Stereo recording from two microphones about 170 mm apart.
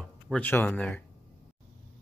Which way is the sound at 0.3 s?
10° left (ahead or behind).